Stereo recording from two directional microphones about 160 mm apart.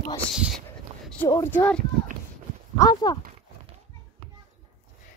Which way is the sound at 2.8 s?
25° left (ahead or behind).